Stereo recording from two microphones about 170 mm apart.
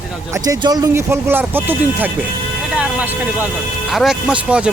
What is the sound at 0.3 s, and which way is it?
Speech, 20° right (ahead or behind).